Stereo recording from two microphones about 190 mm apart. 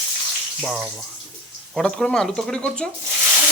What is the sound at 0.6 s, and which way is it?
Speech, centre (ahead or behind).